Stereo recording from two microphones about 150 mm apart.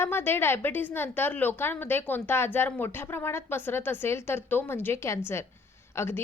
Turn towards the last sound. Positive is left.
turn(degrees=15)  # may be behind; listen again after turning